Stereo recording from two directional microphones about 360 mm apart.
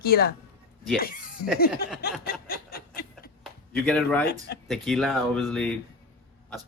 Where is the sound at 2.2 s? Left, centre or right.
Left.